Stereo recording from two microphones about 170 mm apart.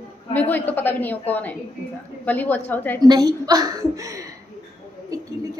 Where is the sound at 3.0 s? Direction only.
25° right (ahead or behind).